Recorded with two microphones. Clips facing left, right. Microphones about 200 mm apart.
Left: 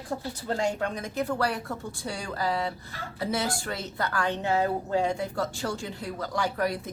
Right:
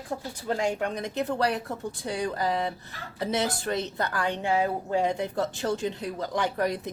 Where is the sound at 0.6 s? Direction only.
15° right (ahead or behind).